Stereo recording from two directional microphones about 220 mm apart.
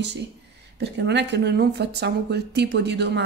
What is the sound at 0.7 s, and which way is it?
Speech, 50° right (ahead or behind).